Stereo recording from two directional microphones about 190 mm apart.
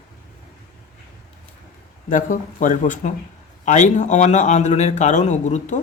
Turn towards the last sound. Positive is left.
turn(degrees=40)  # may be behind; listen again after turning